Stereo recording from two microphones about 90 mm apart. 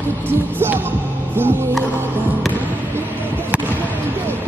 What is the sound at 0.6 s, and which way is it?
Music, 25° right (ahead or behind).